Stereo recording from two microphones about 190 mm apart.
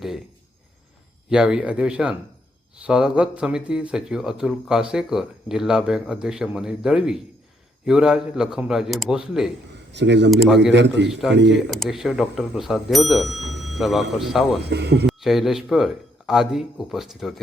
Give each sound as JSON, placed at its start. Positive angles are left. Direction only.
{"t": 1.3, "sound": "speech", "side_deg": -5}
{"t": 9.9, "sound": "a man's voice", "side_deg": -65}
{"t": 11.1, "sound": "speech", "side_deg": 0}
{"t": 13.5, "sound": "a sound", "side_deg": 0}
{"t": 14.2, "sound": "speech", "side_deg": 0}
{"t": 14.6, "sound": "speech", "side_deg": -60}
{"t": 15.0, "sound": "speech", "side_deg": 0}